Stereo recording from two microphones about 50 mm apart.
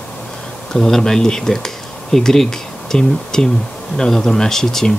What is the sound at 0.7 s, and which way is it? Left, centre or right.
Speech, centre.